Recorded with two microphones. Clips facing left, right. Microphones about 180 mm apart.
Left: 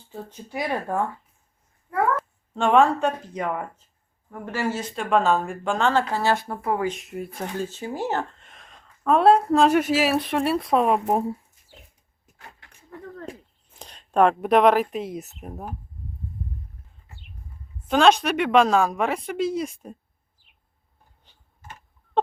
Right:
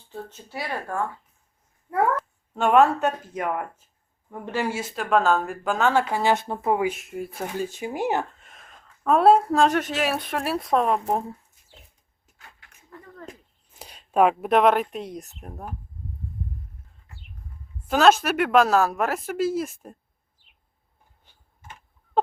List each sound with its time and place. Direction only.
0.1 s speech: 15° left (ahead or behind)
2.1 s speech: 5° right (ahead or behind)
4.3 s speech: 15° right (ahead or behind)
6.8 s speech: 5° right (ahead or behind)
9.6 s speech: 10° left (ahead or behind)
13.7 s speech: 10° right (ahead or behind)
17.8 s speech: 5° right (ahead or behind)